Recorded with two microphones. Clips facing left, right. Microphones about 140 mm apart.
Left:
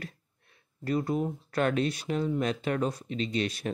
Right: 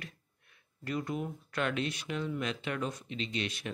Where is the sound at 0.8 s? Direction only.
35° left (ahead or behind).